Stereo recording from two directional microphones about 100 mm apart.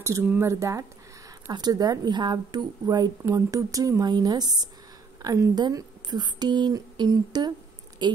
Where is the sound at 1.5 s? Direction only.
45° right (ahead or behind).